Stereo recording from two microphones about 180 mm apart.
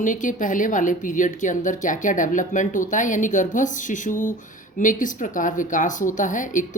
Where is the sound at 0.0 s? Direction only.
45° left (ahead or behind).